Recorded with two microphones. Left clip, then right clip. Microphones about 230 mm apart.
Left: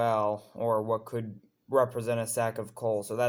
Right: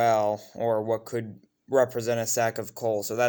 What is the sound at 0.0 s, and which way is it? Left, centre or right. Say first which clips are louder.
Speech: right 4 dB; right.